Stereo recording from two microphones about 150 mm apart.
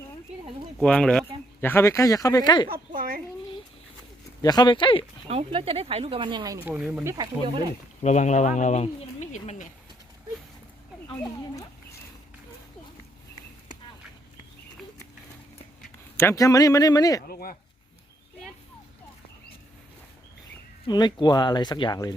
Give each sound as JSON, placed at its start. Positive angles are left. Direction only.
{"t": 0.8, "sound": "speech", "side_deg": 5}
{"t": 1.6, "sound": "speech", "side_deg": 15}
{"t": 2.6, "sound": "speech", "side_deg": -75}
{"t": 4.4, "sound": "speech", "side_deg": 30}
{"t": 5.3, "sound": "speech", "side_deg": -40}
{"t": 6.7, "sound": "speech", "side_deg": -10}
{"t": 7.2, "sound": "speech", "side_deg": -30}
{"t": 8.0, "sound": "speech", "side_deg": 50}
{"t": 16.1, "sound": "speech", "side_deg": 20}
{"t": 17.2, "sound": "speech", "side_deg": 75}
{"t": 20.8, "sound": "speech", "side_deg": 30}